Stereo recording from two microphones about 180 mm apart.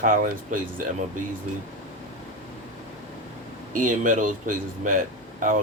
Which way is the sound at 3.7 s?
45° right (ahead or behind).